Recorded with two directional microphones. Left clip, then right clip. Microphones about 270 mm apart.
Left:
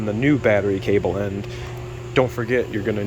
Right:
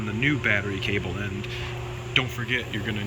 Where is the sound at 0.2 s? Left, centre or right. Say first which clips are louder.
Left 5 dB; centre.